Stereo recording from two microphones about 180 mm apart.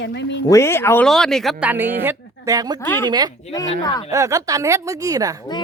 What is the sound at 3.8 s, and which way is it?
Speech, 20° left (ahead or behind).